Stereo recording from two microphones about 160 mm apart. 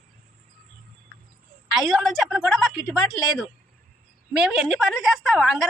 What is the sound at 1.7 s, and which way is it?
A woman's voice, centre (ahead or behind).